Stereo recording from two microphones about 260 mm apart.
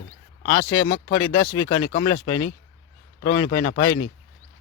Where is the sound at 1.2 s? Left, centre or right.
Centre.